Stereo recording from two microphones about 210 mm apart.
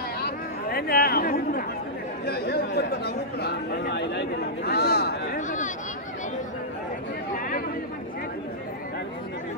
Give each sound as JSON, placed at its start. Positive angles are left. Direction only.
{"t": 0.2, "sound": "a sound", "side_deg": 45}
{"t": 2.2, "sound": "speech", "side_deg": 50}
{"t": 7.3, "sound": "chatter", "side_deg": 45}